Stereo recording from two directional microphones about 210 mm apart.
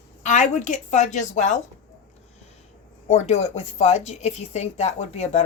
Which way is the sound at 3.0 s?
30° left (ahead or behind).